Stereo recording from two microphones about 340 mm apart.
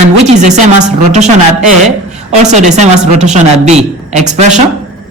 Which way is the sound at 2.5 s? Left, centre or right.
Right.